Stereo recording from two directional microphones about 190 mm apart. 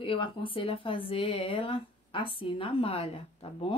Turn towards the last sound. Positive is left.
turn(degrees=30)  # may be behind; listen again after turning